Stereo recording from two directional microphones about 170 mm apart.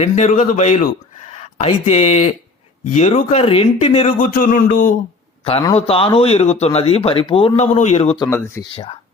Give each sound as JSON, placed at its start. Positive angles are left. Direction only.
{"t": 0.0, "sound": "a man's voice", "side_deg": 45}
{"t": 4.2, "sound": "a man's voice", "side_deg": 55}
{"t": 5.7, "sound": "speech", "side_deg": 35}
{"t": 8.2, "sound": "speech", "side_deg": 15}
{"t": 8.7, "sound": "speech", "side_deg": 30}